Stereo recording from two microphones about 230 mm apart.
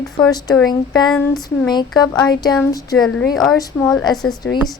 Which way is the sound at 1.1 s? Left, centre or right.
Centre.